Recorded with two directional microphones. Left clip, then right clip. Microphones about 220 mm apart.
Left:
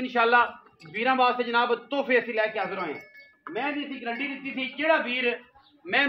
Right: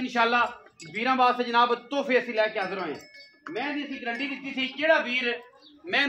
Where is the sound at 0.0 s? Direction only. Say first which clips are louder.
Left 2 dB; 25° left (ahead or behind).